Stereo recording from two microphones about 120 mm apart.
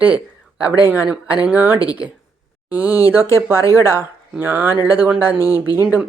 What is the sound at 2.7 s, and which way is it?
Speech, 15° right (ahead or behind).